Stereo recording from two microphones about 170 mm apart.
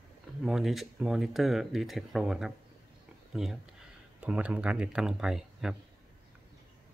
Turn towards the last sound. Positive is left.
turn(degrees=-5)  # may be behind; listen again after turning